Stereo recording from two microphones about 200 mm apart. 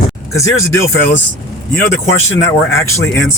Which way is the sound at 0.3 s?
15° left (ahead or behind).